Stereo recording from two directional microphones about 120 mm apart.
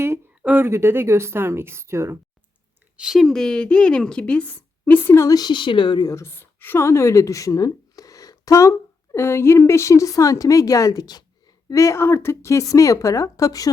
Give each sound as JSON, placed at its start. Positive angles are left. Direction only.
{"t": 0.4, "sound": "speech", "side_deg": -15}
{"t": 3.0, "sound": "a woman's voice", "side_deg": 0}